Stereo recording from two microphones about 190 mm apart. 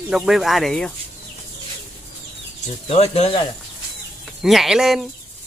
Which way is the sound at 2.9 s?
30° left (ahead or behind).